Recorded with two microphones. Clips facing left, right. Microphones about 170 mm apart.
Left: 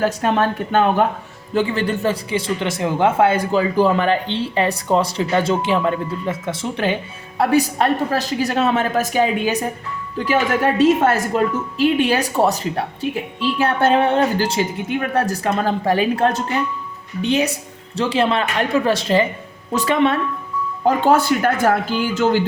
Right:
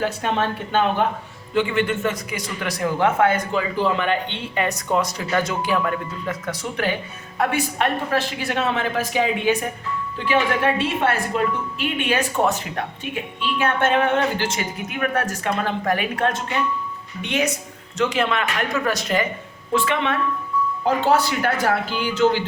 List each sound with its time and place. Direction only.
0.0 s a man's voice: 45° left (ahead or behind); by 6.9 s 25° left (ahead or behind)
7.3 s a woman's voice: 35° left (ahead or behind)
19.7 s a woman's voice: 40° left (ahead or behind)